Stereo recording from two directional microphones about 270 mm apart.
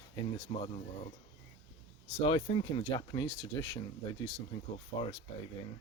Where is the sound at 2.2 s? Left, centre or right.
Centre.